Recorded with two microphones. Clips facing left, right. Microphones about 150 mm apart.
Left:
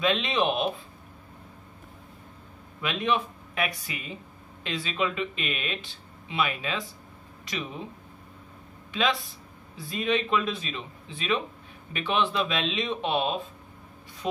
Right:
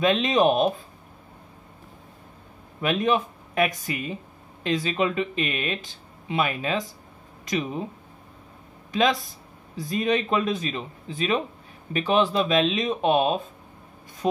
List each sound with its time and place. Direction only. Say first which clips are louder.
0.0 s speech: right 5 dB; 45° right (ahead or behind)
2.8 s speech: right 5 dB; 45° right (ahead or behind)
8.9 s speech: right 5 dB; 40° right (ahead or behind)